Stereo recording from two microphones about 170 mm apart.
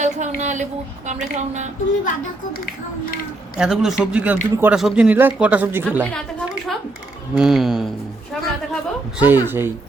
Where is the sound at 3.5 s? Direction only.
5° right (ahead or behind).